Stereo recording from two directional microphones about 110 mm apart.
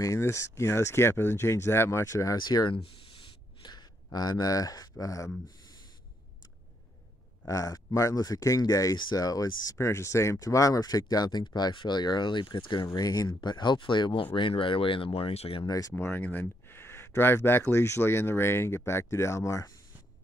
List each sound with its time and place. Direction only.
0.0 s speech: 25° left (ahead or behind)
7.4 s speech: 30° left (ahead or behind)
12.8 s speech: 35° left (ahead or behind); by 15.6 s 60° left (ahead or behind)
15.6 s speech: 35° left (ahead or behind)
16.0 s speech: 15° left (ahead or behind)